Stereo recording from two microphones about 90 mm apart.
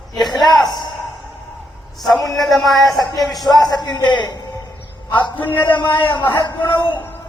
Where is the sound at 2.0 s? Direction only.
Centre (ahead or behind).